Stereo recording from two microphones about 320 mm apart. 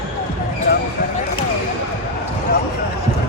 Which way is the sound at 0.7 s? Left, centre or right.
Left.